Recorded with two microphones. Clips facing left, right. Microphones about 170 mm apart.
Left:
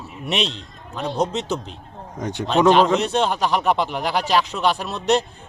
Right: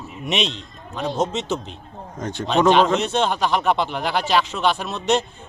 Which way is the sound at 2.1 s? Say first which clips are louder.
Left 1 dB; 15° left (ahead or behind).